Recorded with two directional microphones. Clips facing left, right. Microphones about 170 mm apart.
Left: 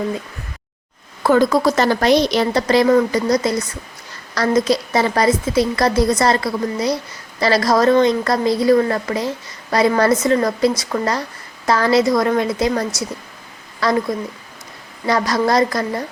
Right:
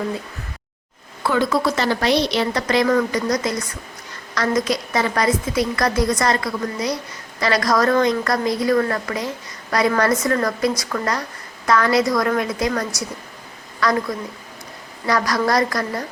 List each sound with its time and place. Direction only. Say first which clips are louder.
1.2 s a woman's voice: left 5 dB; 40° left (ahead or behind)
2.5 s a woman's voice: left 6 dB; 30° left (ahead or behind)
13.8 s a woman's voice: left 2 dB; 30° left (ahead or behind)
15.0 s a woman's voice: left 2 dB; 25° left (ahead or behind)